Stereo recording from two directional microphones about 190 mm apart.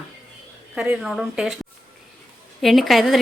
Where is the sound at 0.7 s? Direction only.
5° right (ahead or behind).